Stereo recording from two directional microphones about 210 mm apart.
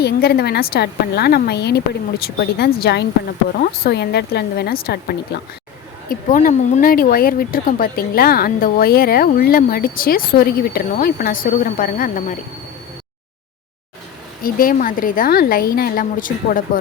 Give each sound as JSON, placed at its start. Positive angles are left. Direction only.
{"t": 0.0, "sound": "speech", "side_deg": 50}
{"t": 6.1, "sound": "speech", "side_deg": 40}
{"t": 14.4, "sound": "a woman's voice", "side_deg": 40}